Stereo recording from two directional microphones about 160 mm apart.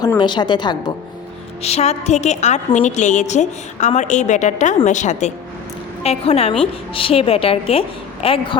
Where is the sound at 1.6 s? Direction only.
40° left (ahead or behind).